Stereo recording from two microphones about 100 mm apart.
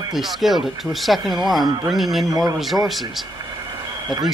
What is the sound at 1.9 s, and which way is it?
Speech, centre (ahead or behind).